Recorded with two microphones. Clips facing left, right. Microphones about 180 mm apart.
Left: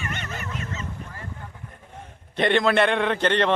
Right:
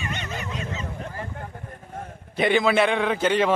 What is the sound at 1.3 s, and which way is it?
Vehicle, 55° right (ahead or behind).